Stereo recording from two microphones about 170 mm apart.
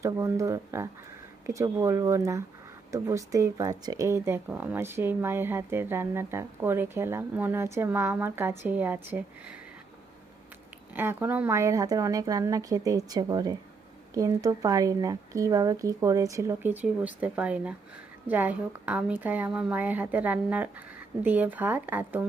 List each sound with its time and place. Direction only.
0.0 s speech: 20° right (ahead or behind)
10.9 s speech: 10° right (ahead or behind)